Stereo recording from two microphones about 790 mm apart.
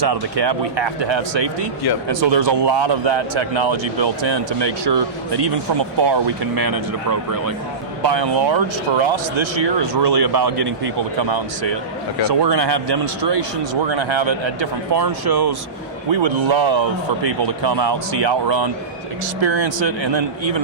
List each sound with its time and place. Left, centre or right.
0.1 s speech: right